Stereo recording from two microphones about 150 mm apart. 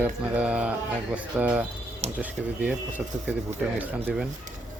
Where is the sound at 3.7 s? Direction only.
5° right (ahead or behind).